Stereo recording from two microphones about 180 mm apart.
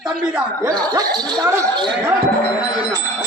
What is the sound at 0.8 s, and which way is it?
Speech, 20° right (ahead or behind).